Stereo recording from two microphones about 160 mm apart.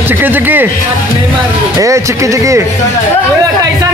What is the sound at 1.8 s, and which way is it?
Speech, 20° right (ahead or behind).